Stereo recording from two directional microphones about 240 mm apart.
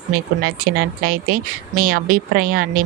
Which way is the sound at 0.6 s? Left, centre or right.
Right.